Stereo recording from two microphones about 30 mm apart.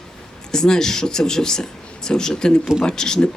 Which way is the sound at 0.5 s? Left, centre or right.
Left.